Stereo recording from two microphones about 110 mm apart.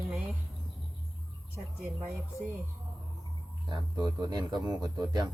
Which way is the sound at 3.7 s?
40° right (ahead or behind).